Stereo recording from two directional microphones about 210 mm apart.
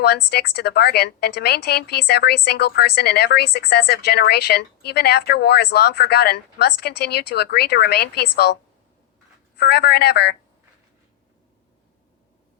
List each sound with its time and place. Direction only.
0.0 s a woman's voice: 50° left (ahead or behind)
9.6 s a woman's voice: 50° left (ahead or behind)